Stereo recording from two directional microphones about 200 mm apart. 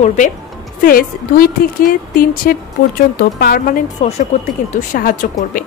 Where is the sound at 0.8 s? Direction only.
45° left (ahead or behind).